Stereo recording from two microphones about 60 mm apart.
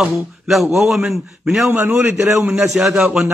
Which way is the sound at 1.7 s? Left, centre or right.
Right.